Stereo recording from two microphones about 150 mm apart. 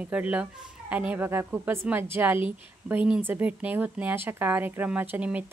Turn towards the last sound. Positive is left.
turn(degrees=-10)  # may be behind; listen again after turning